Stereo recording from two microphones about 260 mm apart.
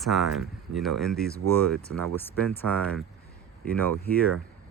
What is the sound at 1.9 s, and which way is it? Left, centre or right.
Speech, right.